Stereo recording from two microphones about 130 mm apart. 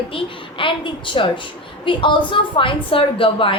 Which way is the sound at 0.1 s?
45° left (ahead or behind).